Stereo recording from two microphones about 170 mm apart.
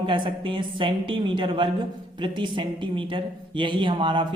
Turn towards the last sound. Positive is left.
turn(degrees=-30)  # may be behind; listen again after turning